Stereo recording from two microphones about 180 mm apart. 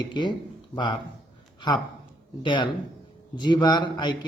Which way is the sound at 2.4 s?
25° left (ahead or behind).